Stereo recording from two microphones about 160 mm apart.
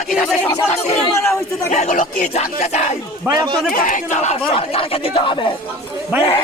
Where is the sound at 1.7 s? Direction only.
50° left (ahead or behind).